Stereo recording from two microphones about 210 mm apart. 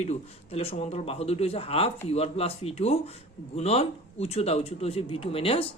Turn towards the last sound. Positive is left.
turn(degrees=25)  # may be behind; listen again after turning